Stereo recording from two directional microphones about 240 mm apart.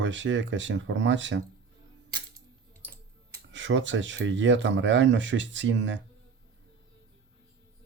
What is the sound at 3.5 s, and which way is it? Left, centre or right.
Speech, right.